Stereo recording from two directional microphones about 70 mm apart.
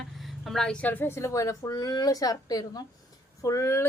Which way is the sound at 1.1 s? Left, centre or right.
Left.